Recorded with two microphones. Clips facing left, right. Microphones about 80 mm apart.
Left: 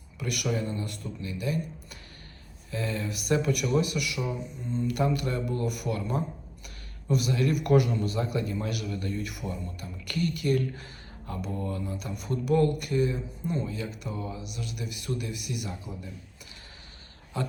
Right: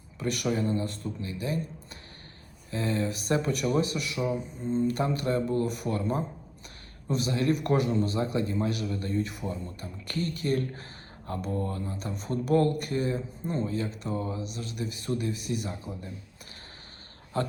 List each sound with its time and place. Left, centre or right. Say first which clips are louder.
0.2 s a man's voice: right 2 dB; right
17.3 s a man's voice: right 3 dB; right